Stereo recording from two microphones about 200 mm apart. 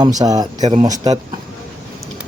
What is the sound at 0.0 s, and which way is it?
Speech, 20° right (ahead or behind).